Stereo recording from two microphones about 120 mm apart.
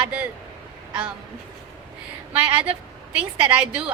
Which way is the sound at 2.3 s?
15° right (ahead or behind).